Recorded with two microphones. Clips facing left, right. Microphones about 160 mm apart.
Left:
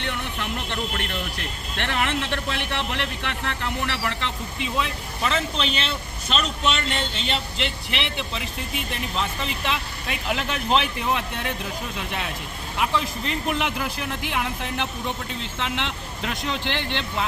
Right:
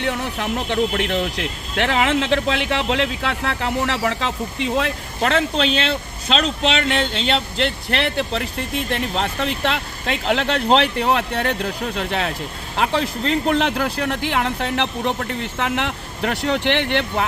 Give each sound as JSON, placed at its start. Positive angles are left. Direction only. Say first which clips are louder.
{"t": 0.1, "sound": "speech", "louder": "right 6 dB", "side_deg": -70}
{"t": 8.9, "sound": "speech", "louder": "right 4 dB", "side_deg": -65}